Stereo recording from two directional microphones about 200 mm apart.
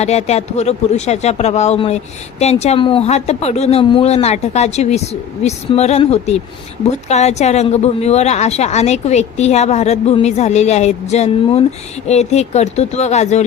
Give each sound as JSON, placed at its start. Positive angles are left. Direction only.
{"t": 0.0, "sound": "a woman's voice", "side_deg": 30}